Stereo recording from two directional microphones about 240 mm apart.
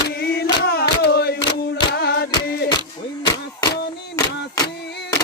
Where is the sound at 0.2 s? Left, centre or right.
Left.